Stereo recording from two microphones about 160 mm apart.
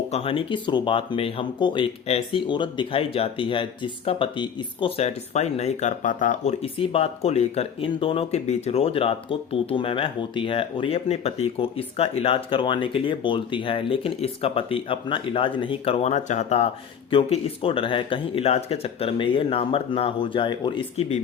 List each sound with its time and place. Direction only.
0.1 s speech: 35° left (ahead or behind)